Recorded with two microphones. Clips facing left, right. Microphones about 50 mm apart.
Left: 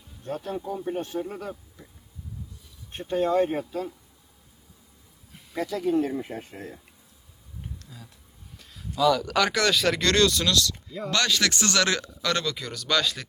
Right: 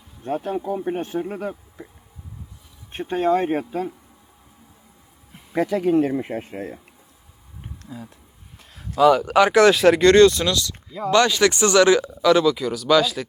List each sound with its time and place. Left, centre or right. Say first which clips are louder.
0.2 s speech: right 7 dB; right
2.9 s speech: right 4 dB; right
5.5 s speech: right 6 dB; right
7.6 s a sound: right 7 dB; right
8.5 s speech: right 7 dB; right; by 10.8 s centre
10.8 s speech: right 6 dB; centre
11.1 s speech: right 8 dB; centre